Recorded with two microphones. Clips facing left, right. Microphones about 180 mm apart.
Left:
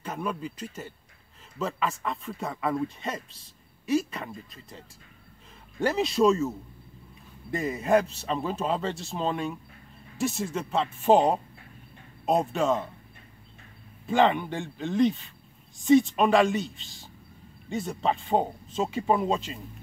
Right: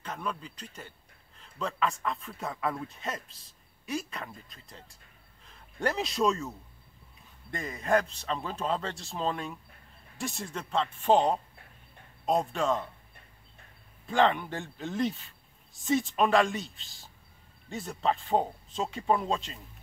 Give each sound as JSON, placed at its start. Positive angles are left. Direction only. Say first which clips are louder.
{"t": 0.0, "sound": "speech", "louder": "left 5 dB", "side_deg": 10}
{"t": 7.5, "sound": "speech", "louder": "left 4 dB", "side_deg": 5}
{"t": 14.0, "sound": "speech", "louder": "left 3 dB", "side_deg": 5}